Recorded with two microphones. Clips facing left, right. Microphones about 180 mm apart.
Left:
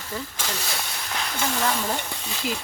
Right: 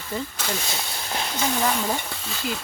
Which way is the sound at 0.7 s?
25° right (ahead or behind).